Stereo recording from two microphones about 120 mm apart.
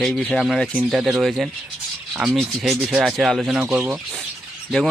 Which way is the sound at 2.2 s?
Centre (ahead or behind).